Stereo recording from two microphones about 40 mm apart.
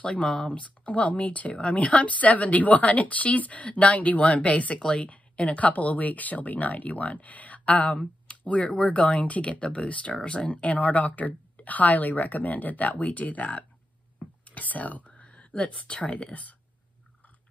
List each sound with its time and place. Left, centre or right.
0.5 s speech: left